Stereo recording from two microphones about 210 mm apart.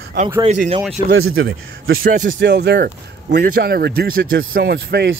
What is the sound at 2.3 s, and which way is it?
A man's voice, 55° right (ahead or behind).